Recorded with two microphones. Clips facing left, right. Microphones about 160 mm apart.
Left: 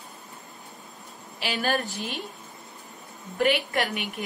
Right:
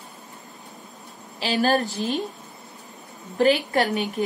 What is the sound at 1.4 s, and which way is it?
Speech, 35° right (ahead or behind).